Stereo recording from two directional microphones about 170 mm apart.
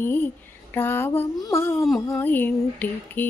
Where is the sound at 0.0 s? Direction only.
10° left (ahead or behind).